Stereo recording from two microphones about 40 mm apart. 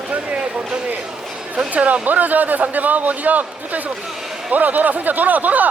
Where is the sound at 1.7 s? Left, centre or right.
Right.